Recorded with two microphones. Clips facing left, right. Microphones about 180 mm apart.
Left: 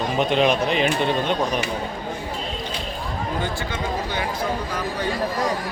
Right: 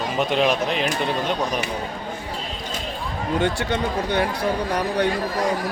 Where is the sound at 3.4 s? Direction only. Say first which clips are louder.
Right 5 dB; 65° right (ahead or behind).